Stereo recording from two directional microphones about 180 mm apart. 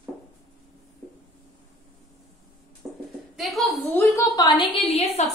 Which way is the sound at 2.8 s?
5° right (ahead or behind).